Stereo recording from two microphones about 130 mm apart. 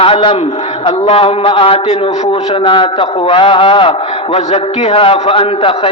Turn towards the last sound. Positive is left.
turn(degrees=45)  # may be behind; listen again after turning